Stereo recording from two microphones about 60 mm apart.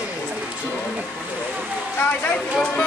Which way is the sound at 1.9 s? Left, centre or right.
Left.